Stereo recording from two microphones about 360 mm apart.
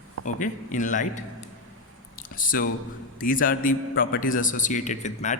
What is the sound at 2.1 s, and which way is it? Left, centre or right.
Drip, left.